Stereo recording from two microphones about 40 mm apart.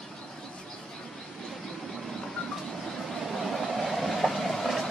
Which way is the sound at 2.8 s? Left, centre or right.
Centre.